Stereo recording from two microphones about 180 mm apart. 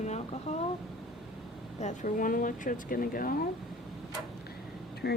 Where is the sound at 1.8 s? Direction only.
45° left (ahead or behind).